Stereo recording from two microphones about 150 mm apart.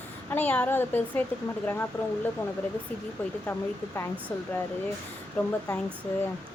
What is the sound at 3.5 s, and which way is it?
Speech, 15° left (ahead or behind).